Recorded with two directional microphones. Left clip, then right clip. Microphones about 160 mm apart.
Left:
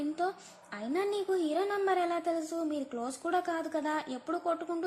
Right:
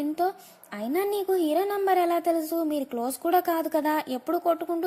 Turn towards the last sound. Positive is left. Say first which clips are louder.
# right 8 dB
turn(degrees=-35)  # may be behind; listen again after turning